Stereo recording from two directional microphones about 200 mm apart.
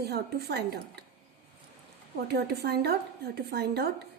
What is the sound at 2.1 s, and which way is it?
A woman's voice, 50° right (ahead or behind).